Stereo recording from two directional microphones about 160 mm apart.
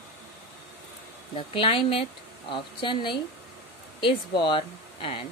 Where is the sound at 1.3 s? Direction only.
35° left (ahead or behind).